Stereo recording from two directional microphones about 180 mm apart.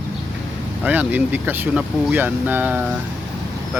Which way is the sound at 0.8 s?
10° right (ahead or behind).